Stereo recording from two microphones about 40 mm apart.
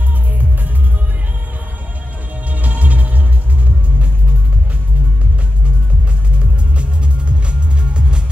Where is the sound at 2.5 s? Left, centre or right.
Right.